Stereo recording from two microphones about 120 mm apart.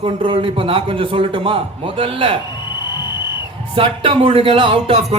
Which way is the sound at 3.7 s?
50° right (ahead or behind).